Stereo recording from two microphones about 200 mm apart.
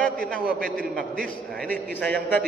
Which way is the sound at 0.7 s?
45° right (ahead or behind).